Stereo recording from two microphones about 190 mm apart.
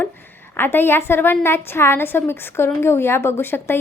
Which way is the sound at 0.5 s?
10° left (ahead or behind).